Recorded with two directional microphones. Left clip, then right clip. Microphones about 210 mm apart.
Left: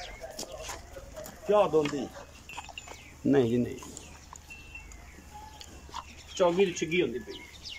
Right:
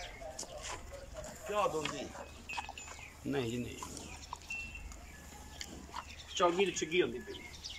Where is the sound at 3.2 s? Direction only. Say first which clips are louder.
Left 12 dB; 30° left (ahead or behind).